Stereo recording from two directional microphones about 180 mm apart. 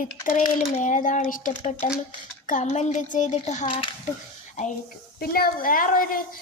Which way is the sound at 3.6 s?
30° left (ahead or behind).